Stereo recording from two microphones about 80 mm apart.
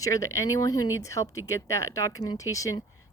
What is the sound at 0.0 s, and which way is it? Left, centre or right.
Speech, left.